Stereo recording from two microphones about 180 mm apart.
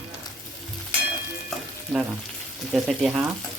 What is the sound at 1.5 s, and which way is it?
Frying, centre (ahead or behind).